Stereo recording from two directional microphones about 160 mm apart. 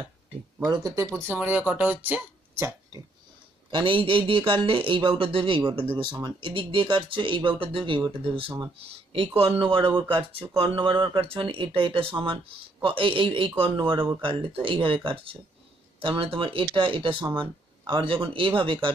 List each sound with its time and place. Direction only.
0.7 s speech: 20° right (ahead or behind)
2.0 s a sound: 10° right (ahead or behind)
3.7 s speech: 30° right (ahead or behind)